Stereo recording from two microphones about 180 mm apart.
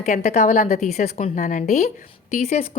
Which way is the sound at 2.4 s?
35° left (ahead or behind).